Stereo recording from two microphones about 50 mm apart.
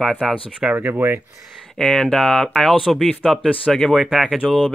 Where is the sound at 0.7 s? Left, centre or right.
Right.